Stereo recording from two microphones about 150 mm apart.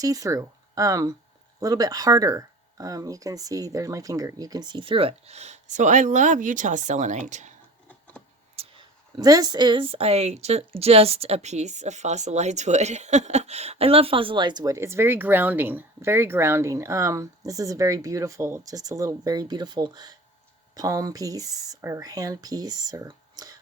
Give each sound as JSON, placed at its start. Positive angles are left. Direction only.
{"t": 0.0, "sound": "speech", "side_deg": -25}
{"t": 8.5, "sound": "speech", "side_deg": -35}